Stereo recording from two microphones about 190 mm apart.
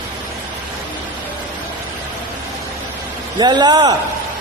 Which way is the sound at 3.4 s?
20° right (ahead or behind).